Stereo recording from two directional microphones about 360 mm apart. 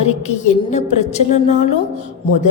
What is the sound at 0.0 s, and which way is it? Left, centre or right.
A woman's voice, centre.